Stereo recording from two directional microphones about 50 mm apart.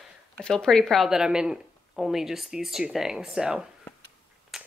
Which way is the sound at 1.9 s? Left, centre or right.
Centre.